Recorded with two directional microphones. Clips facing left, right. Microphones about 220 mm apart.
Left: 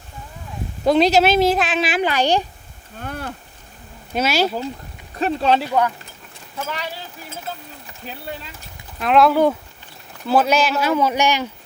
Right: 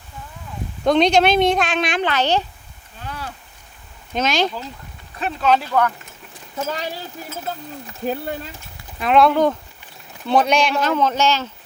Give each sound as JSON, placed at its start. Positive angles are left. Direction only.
{"t": 0.9, "sound": "speech", "side_deg": 5}
{"t": 3.0, "sound": "a sound", "side_deg": 50}
{"t": 4.1, "sound": "speech", "side_deg": 10}
{"t": 5.2, "sound": "speech", "side_deg": 30}
{"t": 5.6, "sound": "speech", "side_deg": 15}
{"t": 8.0, "sound": "speech", "side_deg": -50}
{"t": 9.0, "sound": "speech", "side_deg": 0}